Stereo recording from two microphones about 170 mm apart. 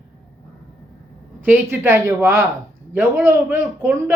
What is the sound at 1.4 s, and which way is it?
Speech, 10° right (ahead or behind).